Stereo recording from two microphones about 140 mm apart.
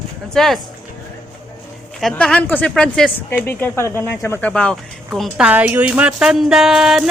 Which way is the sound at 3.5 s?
15° left (ahead or behind).